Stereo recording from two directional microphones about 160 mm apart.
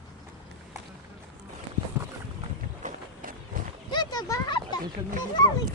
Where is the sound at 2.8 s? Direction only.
50° right (ahead or behind).